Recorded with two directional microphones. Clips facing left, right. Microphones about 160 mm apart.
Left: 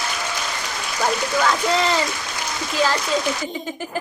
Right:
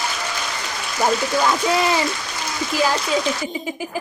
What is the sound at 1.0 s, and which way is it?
Speech, 10° right (ahead or behind).